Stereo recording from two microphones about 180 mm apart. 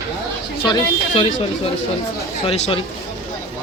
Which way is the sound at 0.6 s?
25° left (ahead or behind).